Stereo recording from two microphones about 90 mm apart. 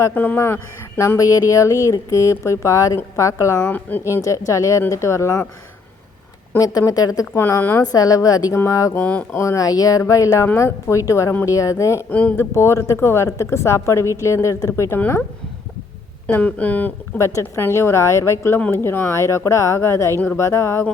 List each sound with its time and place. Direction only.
0.1 s speech: 20° left (ahead or behind); by 3.6 s 35° left (ahead or behind)
3.6 s a woman's voice: 20° left (ahead or behind)
4.2 s speech: 35° left (ahead or behind)
6.6 s speech: 40° left (ahead or behind)
7.3 s a woman's voice: 25° left (ahead or behind)
7.8 s speech: 40° left (ahead or behind); by 15.2 s 25° left (ahead or behind)
16.2 s speech: 15° left (ahead or behind)
17.2 s a woman's voice: 35° left (ahead or behind)